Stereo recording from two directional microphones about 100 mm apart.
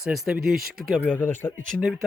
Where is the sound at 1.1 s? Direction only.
20° left (ahead or behind).